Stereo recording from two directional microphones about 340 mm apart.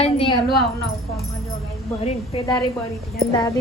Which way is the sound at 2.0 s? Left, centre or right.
Centre.